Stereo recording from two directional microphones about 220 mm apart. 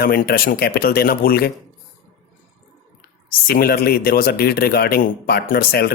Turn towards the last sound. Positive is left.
turn(degrees=45)  # may be behind; listen again after turning